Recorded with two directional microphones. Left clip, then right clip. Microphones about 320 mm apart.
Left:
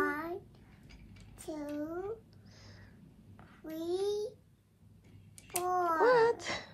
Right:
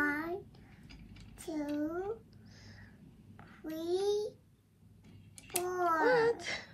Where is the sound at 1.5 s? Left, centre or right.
Centre.